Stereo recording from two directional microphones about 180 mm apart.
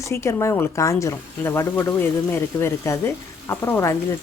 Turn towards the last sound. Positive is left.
turn(degrees=15)  # may be behind; listen again after turning